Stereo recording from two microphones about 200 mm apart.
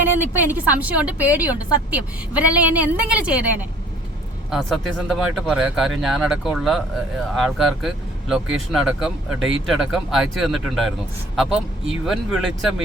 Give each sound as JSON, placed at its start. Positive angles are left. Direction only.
{"t": 0.0, "sound": "a woman's voice", "side_deg": -10}